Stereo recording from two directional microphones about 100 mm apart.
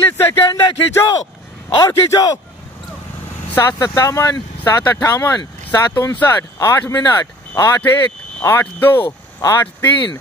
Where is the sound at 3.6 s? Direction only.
40° left (ahead or behind).